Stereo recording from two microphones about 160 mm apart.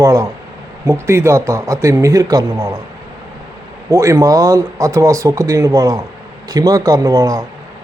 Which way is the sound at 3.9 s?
20° right (ahead or behind).